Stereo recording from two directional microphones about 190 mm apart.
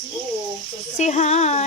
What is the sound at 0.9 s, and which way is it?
Speech, 40° left (ahead or behind).